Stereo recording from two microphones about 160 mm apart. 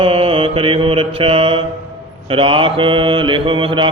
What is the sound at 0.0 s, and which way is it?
Mantra, 35° right (ahead or behind).